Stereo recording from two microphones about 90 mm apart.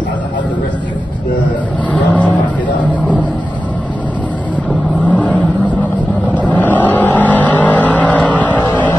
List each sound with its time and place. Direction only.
2.0 s vehicle: 15° left (ahead or behind)
5.0 s vehicle: 15° left (ahead or behind)